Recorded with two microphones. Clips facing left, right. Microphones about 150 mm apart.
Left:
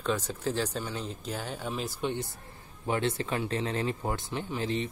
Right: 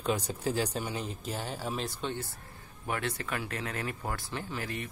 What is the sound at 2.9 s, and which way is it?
Speech, 25° left (ahead or behind).